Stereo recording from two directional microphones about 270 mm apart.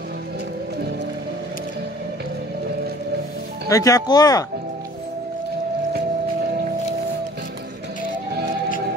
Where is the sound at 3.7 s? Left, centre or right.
Centre.